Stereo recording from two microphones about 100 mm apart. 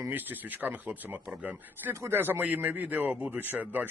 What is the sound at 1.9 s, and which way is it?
A man's voice, 25° right (ahead or behind).